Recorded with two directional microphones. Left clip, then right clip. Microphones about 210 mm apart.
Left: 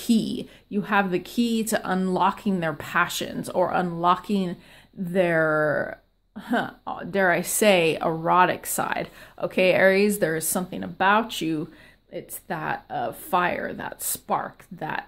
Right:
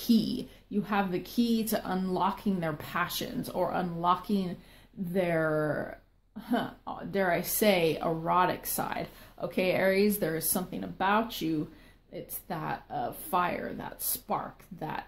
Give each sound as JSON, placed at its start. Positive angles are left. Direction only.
{"t": 0.0, "sound": "speech", "side_deg": 30}